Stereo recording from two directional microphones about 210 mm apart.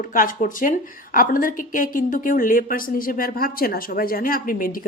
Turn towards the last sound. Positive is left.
turn(degrees=40)  # may be behind; listen again after turning